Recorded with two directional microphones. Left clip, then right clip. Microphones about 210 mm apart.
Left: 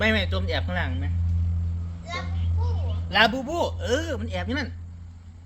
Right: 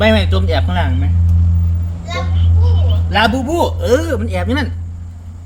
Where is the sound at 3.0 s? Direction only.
5° right (ahead or behind).